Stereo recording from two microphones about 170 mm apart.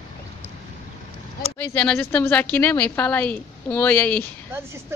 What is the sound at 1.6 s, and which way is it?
A woman's voice, 10° left (ahead or behind).